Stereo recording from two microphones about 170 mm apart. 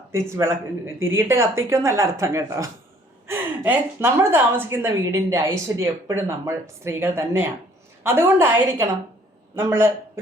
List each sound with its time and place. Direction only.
0.1 s a woman's voice: 15° right (ahead or behind)